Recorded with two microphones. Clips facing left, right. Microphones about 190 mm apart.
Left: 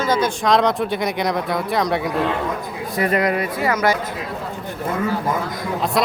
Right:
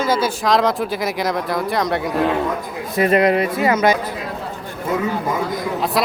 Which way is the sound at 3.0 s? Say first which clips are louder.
Right 4 dB; 25° right (ahead or behind).